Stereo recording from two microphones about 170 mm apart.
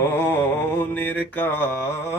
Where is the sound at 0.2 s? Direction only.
15° left (ahead or behind).